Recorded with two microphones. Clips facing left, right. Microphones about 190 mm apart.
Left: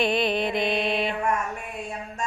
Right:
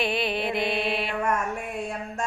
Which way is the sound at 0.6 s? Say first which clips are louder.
Left 2 dB; 20° left (ahead or behind).